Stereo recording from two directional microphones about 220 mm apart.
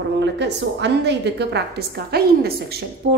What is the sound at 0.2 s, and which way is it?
A woman's voice, 55° right (ahead or behind).